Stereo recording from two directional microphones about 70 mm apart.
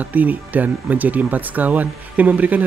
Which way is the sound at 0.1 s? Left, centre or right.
Right.